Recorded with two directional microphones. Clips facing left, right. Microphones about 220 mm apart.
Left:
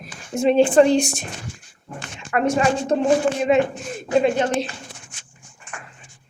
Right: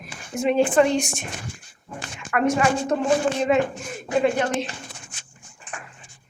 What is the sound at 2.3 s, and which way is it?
A woman's voice, 25° left (ahead or behind).